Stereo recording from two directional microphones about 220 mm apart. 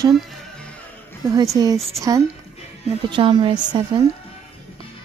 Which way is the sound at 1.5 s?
15° right (ahead or behind).